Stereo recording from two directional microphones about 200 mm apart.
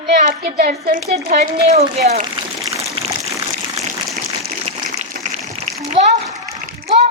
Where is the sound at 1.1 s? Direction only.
30° right (ahead or behind).